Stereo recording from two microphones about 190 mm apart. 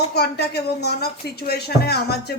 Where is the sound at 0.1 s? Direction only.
55° left (ahead or behind).